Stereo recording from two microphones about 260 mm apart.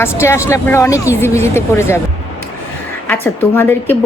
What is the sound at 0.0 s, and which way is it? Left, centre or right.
A woman's voice, centre.